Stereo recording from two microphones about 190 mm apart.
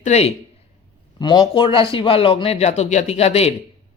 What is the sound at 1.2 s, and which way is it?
A man's voice, 25° left (ahead or behind).